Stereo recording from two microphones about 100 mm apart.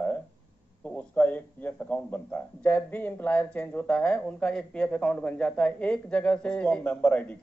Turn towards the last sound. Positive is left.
turn(degrees=15)  # may be behind; listen again after turning